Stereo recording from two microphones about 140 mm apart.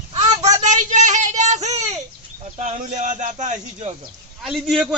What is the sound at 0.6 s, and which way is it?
Child singing, 60° right (ahead or behind).